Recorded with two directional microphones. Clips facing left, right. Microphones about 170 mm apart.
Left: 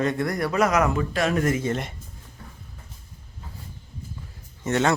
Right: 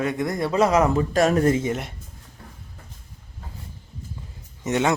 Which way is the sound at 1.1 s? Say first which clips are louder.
Right 4 dB; 40° right (ahead or behind).